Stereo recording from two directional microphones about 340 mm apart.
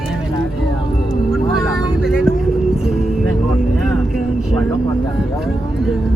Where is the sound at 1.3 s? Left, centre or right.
Centre.